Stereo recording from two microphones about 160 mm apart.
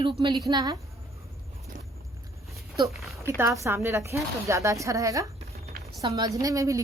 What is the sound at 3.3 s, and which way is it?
Speech, 20° right (ahead or behind).